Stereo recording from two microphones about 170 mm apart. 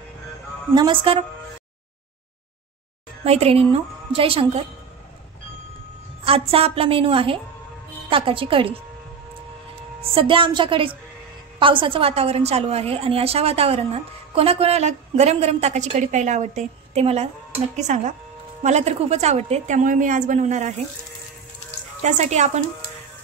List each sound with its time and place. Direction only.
0.7 s a woman's voice: 30° right (ahead or behind)
3.3 s a woman's voice: 35° right (ahead or behind)
6.2 s a woman's voice: 35° right (ahead or behind)
10.1 s a woman's voice: 30° right (ahead or behind); by 20.8 s 45° right (ahead or behind)
22.0 s a woman's voice: 45° right (ahead or behind)